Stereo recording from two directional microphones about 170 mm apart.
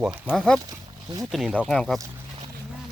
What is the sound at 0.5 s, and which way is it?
Speech, 20° right (ahead or behind).